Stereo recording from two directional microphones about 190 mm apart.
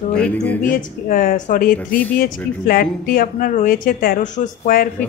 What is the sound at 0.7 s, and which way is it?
Speech, 50° left (ahead or behind).